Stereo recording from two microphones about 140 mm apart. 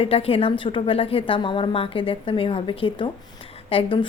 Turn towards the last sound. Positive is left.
turn(degrees=35)  # may be behind; listen again after turning